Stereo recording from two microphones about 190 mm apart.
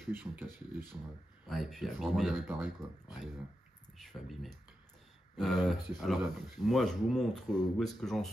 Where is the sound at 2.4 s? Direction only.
10° right (ahead or behind).